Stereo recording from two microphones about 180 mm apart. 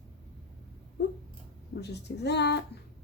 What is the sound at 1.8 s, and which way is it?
Speech, 70° left (ahead or behind).